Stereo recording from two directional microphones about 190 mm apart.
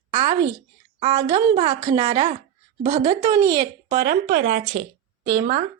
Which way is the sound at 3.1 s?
20° right (ahead or behind).